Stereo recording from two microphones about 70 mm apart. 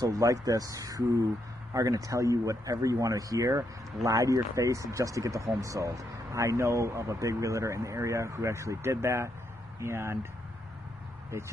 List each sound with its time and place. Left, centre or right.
0.0 s speech: right